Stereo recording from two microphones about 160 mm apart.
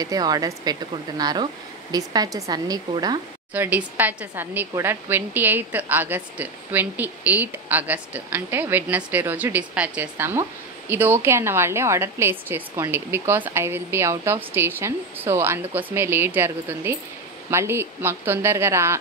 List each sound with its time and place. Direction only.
0.0 s speech: 25° right (ahead or behind)
3.5 s a woman's voice: 10° right (ahead or behind)